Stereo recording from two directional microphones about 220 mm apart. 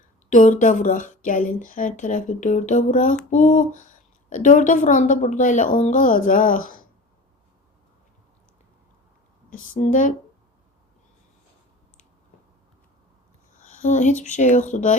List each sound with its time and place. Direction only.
0.3 s a woman's voice: 35° left (ahead or behind)
9.5 s a woman's voice: 35° left (ahead or behind)
13.6 s a sound: 35° left (ahead or behind)
14.3 s a woman's voice: 35° left (ahead or behind)